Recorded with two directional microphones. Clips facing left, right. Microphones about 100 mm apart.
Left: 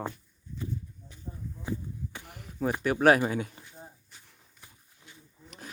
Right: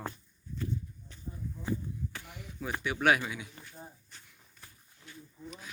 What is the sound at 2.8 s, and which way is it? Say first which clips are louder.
Speech: left 6 dB; 40° left (ahead or behind).